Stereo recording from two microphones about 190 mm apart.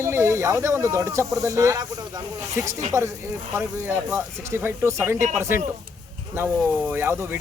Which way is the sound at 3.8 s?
10° right (ahead or behind).